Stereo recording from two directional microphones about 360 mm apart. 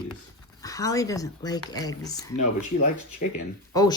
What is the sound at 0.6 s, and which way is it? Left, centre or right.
A woman's voice, centre.